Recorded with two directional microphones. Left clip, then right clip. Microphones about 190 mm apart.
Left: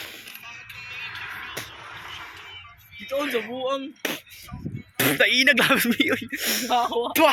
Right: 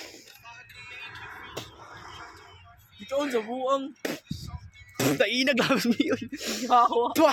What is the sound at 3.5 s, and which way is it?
Speech, 65° right (ahead or behind).